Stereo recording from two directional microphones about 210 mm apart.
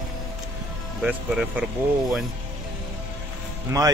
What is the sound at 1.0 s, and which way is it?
Speech, 5° right (ahead or behind).